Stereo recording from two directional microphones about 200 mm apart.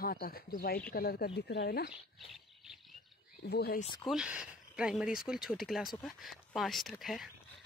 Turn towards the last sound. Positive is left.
turn(degrees=0)  # may be behind; listen again after turning